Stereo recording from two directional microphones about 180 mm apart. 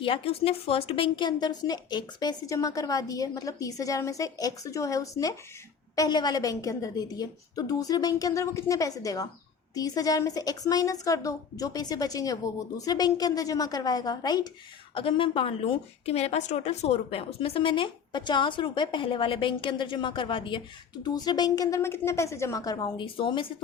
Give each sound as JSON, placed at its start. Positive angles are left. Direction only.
{"t": 0.0, "sound": "a woman's voice", "side_deg": 30}